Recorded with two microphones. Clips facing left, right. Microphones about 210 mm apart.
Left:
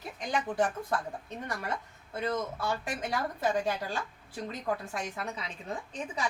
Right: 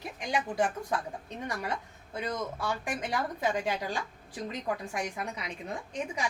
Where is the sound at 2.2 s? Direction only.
15° right (ahead or behind).